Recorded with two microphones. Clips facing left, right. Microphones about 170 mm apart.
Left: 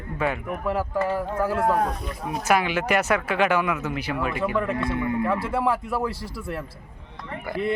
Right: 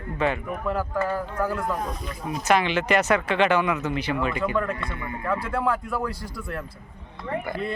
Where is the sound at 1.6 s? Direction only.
65° left (ahead or behind).